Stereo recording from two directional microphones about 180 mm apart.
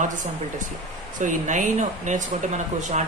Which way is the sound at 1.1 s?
45° right (ahead or behind).